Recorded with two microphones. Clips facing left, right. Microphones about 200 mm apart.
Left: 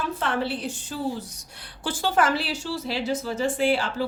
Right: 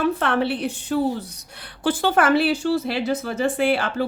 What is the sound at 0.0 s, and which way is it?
A woman's voice, 65° right (ahead or behind).